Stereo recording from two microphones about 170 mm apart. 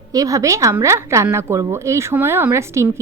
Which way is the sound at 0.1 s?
20° right (ahead or behind).